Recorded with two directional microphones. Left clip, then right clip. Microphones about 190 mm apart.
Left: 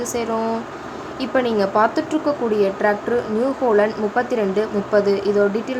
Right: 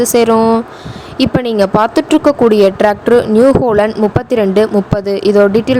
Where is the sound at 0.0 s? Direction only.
45° right (ahead or behind).